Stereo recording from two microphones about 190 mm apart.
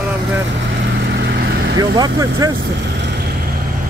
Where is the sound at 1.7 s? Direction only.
20° right (ahead or behind).